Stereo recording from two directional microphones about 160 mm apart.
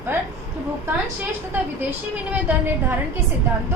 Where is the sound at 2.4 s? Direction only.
15° right (ahead or behind).